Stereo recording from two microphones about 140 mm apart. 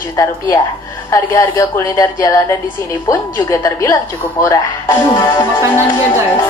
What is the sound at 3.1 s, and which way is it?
A woman's voice, 25° left (ahead or behind).